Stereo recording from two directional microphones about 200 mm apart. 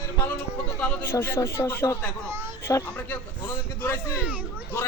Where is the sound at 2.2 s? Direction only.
10° right (ahead or behind).